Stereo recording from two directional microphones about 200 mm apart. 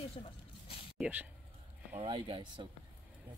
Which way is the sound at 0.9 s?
5° right (ahead or behind).